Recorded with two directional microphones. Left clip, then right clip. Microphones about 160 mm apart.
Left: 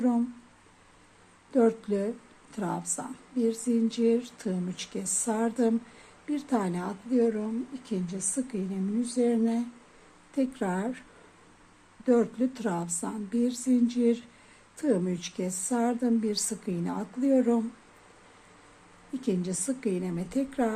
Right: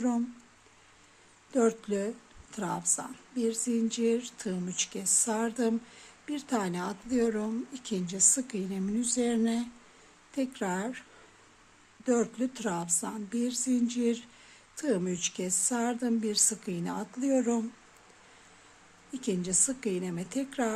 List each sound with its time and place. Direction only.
1.5 s a woman's voice: 10° right (ahead or behind)
12.0 s a woman's voice: 10° right (ahead or behind)
19.2 s a woman's voice: 10° right (ahead or behind)